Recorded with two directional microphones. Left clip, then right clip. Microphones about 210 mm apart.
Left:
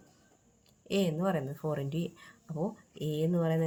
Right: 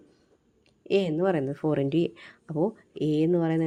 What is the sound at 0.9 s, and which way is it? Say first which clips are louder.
Speech: right 7 dB; 40° right (ahead or behind).